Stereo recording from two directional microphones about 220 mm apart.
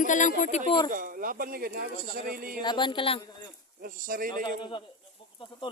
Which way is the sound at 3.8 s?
40° right (ahead or behind).